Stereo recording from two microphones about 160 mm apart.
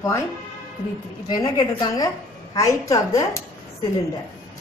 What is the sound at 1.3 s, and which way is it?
A woman's voice, 25° left (ahead or behind).